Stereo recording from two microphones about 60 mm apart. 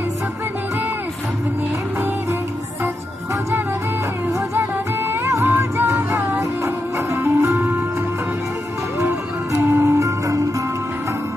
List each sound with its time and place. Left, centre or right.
4.6 s music: right
9.6 s music: right
9.9 s music: right